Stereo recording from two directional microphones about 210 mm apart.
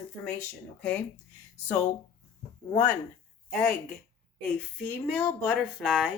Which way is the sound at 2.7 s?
5° left (ahead or behind).